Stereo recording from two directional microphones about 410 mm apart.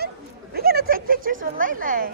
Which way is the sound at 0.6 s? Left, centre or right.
Right.